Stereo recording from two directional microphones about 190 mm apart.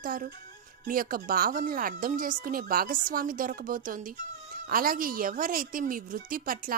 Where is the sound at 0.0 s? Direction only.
45° right (ahead or behind).